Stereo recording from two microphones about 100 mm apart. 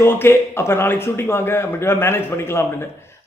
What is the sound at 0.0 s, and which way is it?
Speech, 25° left (ahead or behind).